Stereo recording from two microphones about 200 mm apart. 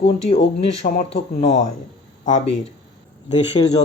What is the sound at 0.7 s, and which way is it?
Speech, 30° left (ahead or behind).